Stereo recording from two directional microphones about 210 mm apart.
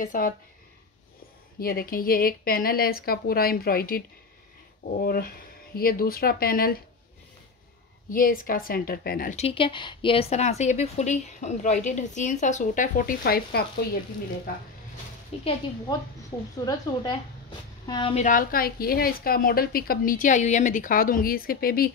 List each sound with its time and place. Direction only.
0.0 s a woman's voice: 40° left (ahead or behind)
1.6 s a woman's voice: 45° left (ahead or behind)
8.1 s a woman's voice: 45° left (ahead or behind)
9.4 s a woman's voice: 25° left (ahead or behind); by 13.8 s 50° left (ahead or behind)
15.3 s speech: 30° left (ahead or behind)
16.6 s a woman's voice: 20° left (ahead or behind)
18.2 s a woman's voice: 40° left (ahead or behind)